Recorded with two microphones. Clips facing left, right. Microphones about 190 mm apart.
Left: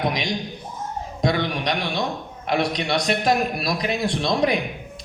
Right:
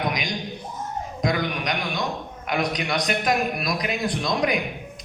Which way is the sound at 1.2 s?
30° left (ahead or behind).